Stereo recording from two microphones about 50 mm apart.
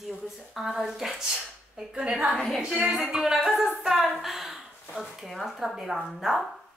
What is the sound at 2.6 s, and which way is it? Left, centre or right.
Speech, centre.